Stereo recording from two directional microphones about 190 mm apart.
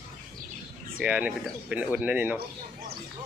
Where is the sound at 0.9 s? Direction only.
10° right (ahead or behind).